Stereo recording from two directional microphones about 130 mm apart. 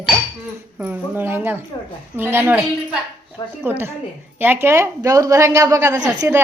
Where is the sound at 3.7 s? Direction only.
15° right (ahead or behind).